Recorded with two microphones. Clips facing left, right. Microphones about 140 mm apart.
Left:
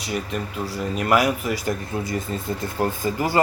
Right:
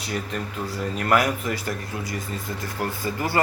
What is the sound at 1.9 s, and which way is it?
A man's voice, 25° left (ahead or behind).